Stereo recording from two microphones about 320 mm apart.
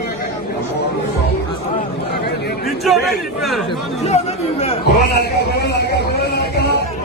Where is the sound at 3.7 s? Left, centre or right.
Centre.